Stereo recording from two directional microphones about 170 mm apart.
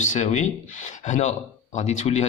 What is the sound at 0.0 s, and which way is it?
Speech, 45° left (ahead or behind).